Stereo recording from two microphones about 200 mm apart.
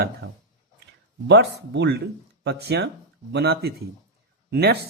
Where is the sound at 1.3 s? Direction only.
60° right (ahead or behind).